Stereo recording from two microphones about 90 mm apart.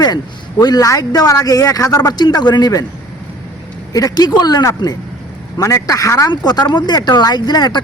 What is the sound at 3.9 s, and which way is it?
A man's voice, 45° left (ahead or behind).